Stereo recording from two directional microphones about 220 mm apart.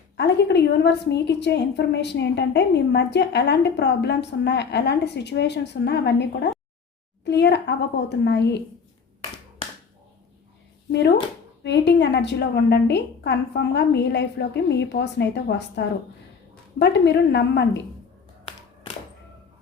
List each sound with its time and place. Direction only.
0.2 s a woman's voice: 50° left (ahead or behind)
11.6 s a woman's voice: 50° left (ahead or behind)
18.4 s a sound: 25° left (ahead or behind)